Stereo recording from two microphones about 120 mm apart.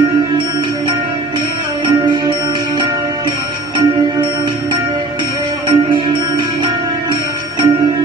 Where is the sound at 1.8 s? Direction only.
40° right (ahead or behind).